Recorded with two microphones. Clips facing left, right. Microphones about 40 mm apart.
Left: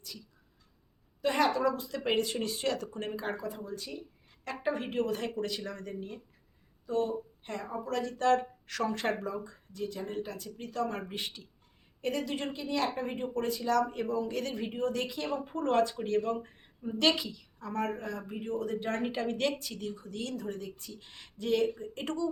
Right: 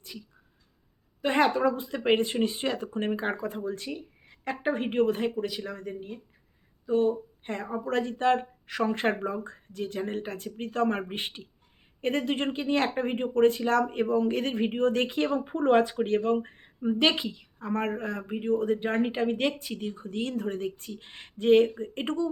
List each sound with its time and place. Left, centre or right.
1.2 s a woman's voice: right
5.2 s speech: centre
6.8 s a woman's voice: right
16.0 s a woman's voice: right
17.0 s a woman's voice: right